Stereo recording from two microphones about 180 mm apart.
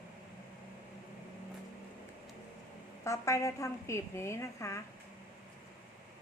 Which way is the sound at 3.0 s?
15° left (ahead or behind).